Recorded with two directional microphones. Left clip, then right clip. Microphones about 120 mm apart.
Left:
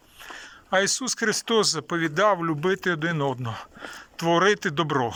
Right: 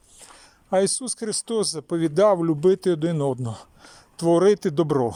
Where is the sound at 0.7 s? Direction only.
40° right (ahead or behind).